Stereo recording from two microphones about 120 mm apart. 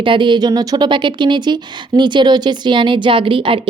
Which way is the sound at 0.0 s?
45° right (ahead or behind).